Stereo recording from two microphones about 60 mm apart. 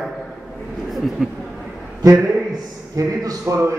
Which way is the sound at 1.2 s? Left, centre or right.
Centre.